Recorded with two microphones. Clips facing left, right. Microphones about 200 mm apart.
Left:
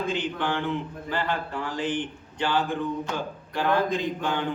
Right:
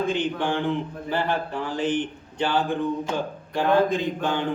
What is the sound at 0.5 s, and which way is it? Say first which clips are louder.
Speech: right 3 dB; 15° right (ahead or behind).